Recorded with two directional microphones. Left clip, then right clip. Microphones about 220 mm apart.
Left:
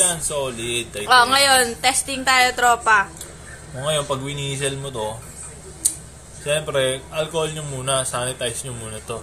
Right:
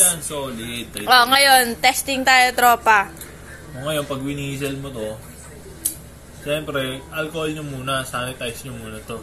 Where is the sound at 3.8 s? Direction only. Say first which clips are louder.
Left 2 dB; 55° left (ahead or behind).